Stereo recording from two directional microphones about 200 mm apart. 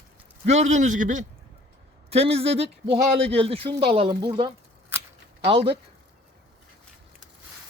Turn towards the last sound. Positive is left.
turn(degrees=-25)  # may be behind; listen again after turning